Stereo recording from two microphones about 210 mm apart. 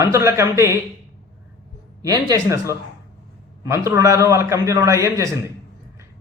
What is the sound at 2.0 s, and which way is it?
Speech, 15° right (ahead or behind).